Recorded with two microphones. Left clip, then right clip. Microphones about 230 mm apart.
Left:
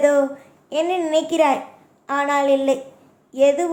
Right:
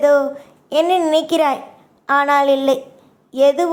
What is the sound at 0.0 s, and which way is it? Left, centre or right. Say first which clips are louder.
A woman's voice: right 3 dB; centre.